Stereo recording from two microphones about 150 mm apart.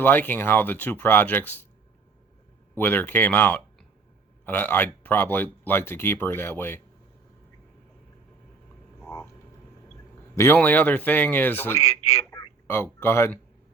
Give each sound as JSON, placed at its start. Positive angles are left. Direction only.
{"t": 0.0, "sound": "speech", "side_deg": 15}
{"t": 2.7, "sound": "speech", "side_deg": 15}
{"t": 9.0, "sound": "frog", "side_deg": 15}
{"t": 10.3, "sound": "speech", "side_deg": 15}
{"t": 11.8, "sound": "a man's voice", "side_deg": 45}
{"t": 12.3, "sound": "a sound", "side_deg": 20}